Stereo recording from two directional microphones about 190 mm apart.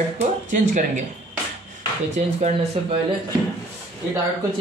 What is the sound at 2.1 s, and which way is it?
Speech, 35° right (ahead or behind).